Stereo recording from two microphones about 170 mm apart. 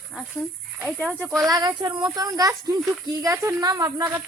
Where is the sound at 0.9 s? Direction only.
10° left (ahead or behind).